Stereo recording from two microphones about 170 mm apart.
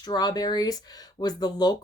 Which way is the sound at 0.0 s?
25° left (ahead or behind).